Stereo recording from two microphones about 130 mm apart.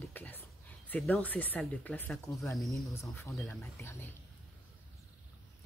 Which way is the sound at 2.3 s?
25° left (ahead or behind).